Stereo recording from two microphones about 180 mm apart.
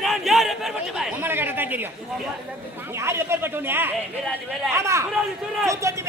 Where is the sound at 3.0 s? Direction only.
15° right (ahead or behind).